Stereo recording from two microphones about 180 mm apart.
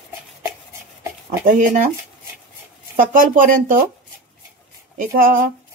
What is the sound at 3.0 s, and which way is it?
Speech, 50° right (ahead or behind).